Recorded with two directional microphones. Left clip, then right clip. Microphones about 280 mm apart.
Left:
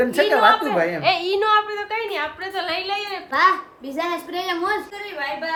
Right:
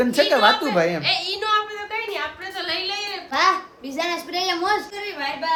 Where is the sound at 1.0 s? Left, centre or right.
Centre.